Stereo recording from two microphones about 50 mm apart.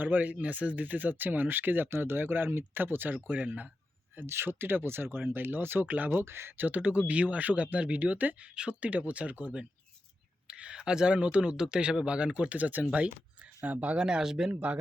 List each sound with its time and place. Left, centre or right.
0.0 s speech: right
1.9 s speech: right
4.2 s speech: right
6.7 s speech: right
14.0 s speech: centre
14.5 s speech: right